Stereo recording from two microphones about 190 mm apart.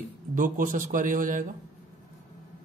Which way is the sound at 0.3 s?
45° right (ahead or behind).